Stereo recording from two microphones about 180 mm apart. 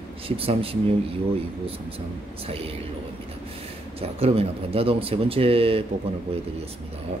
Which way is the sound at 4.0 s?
35° right (ahead or behind).